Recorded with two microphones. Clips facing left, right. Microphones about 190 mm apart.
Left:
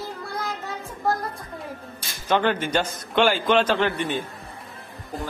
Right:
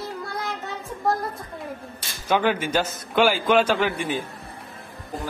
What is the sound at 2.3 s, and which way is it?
A man's voice, 10° right (ahead or behind).